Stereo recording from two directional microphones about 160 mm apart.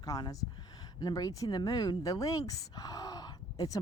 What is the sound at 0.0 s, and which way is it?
Speech, 20° left (ahead or behind).